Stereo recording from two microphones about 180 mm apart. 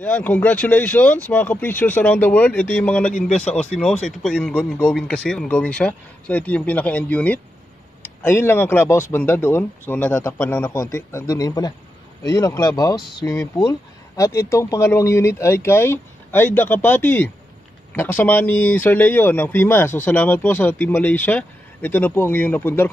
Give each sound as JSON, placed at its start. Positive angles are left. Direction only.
{"t": 0.0, "sound": "speech", "side_deg": 10}
{"t": 3.1, "sound": "speech", "side_deg": 45}
{"t": 3.3, "sound": "speech", "side_deg": 5}